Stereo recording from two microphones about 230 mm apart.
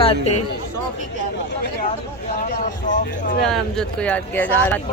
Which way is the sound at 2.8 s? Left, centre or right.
Left.